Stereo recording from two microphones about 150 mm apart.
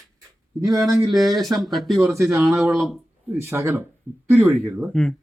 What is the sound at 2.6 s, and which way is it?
Speech, centre (ahead or behind).